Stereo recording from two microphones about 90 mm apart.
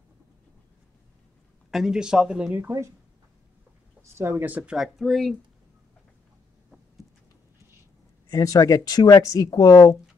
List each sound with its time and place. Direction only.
1.7 s speech: 5° right (ahead or behind)
4.0 s speech: 30° right (ahead or behind)
4.7 s speech: centre (ahead or behind)
8.3 s speech: 40° left (ahead or behind)